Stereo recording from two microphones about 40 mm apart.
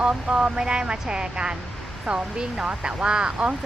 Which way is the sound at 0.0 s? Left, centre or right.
Right.